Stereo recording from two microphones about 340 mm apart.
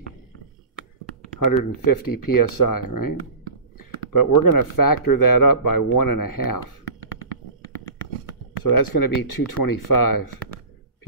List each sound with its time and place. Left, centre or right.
1.6 s speech: left
8.6 s speech: left